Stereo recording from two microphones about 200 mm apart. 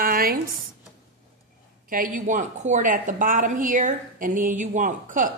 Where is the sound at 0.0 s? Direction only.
45° right (ahead or behind).